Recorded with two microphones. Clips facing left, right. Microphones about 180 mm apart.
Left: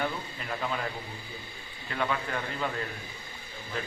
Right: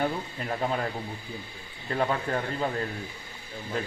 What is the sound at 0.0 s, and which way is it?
Speech, 35° right (ahead or behind).